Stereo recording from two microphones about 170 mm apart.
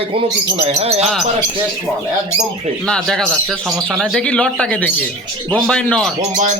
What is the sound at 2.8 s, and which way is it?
Speech, 5° left (ahead or behind).